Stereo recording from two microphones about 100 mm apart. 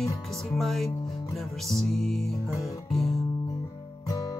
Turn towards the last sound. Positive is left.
turn(degrees=40)  # may be behind; listen again after turning